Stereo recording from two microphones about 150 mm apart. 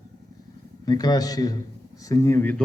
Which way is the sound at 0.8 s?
25° left (ahead or behind).